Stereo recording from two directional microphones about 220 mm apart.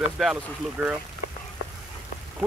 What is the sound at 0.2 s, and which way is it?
Speech, centre (ahead or behind).